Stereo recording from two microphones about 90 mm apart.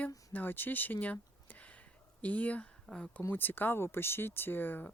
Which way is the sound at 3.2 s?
20° left (ahead or behind).